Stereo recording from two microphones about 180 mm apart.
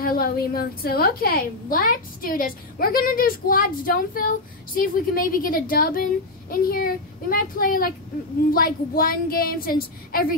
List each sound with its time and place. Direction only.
0.0 s a woman's voice: 55° left (ahead or behind)